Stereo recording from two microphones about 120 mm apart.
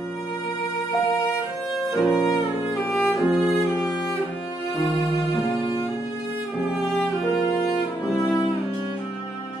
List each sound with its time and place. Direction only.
2.0 s violin: centre (ahead or behind)
2.9 s music: centre (ahead or behind)
8.2 s cello: 30° left (ahead or behind)